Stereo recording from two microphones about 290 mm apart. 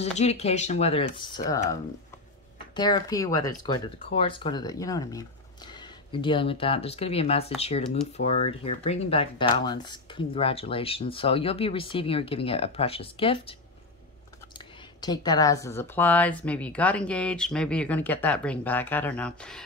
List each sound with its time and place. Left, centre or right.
0.2 s speech: left
15.0 s speech: centre